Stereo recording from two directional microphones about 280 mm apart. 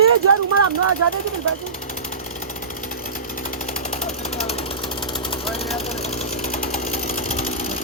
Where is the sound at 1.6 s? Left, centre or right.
Left.